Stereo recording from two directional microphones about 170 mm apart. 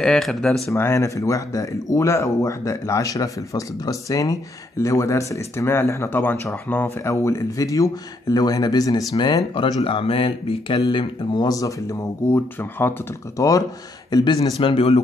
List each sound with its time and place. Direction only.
0.0 s speech: 5° left (ahead or behind)
0.7 s speech: 15° left (ahead or behind); by 15.0 s 35° left (ahead or behind)